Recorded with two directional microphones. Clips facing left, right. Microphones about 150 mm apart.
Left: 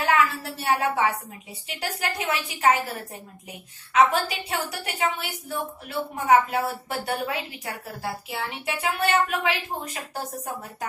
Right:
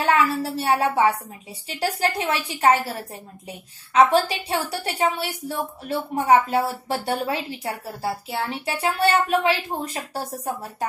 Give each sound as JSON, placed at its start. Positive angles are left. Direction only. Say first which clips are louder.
{"t": 0.0, "sound": "a woman's voice", "louder": "right 3 dB", "side_deg": -35}
{"t": 3.9, "sound": "a woman's voice", "louder": "right 3 dB", "side_deg": -35}